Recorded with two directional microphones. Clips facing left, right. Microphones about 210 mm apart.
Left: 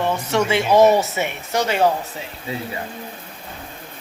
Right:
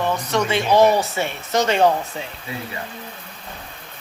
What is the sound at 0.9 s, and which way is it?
Speech, 20° left (ahead or behind).